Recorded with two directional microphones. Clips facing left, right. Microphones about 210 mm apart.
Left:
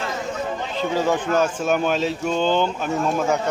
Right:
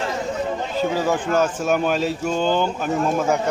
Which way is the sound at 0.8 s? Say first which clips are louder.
Even; 10° right (ahead or behind).